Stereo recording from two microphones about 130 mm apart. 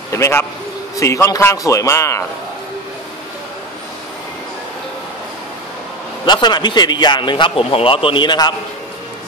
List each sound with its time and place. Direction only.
0.1 s a man's voice: 20° left (ahead or behind)
6.2 s a man's voice: 35° left (ahead or behind)